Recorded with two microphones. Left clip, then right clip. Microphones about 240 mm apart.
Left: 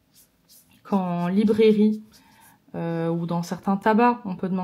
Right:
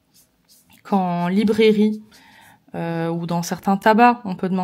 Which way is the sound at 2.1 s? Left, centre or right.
Centre.